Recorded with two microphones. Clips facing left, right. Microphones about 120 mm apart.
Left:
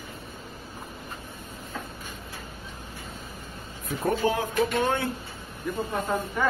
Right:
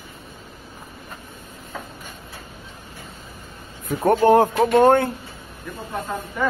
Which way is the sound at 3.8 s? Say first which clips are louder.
Right 9 dB; 70° right (ahead or behind).